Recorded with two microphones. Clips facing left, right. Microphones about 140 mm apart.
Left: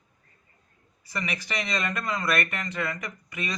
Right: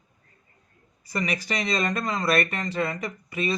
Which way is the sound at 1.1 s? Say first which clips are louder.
Right 4 dB; 40° right (ahead or behind).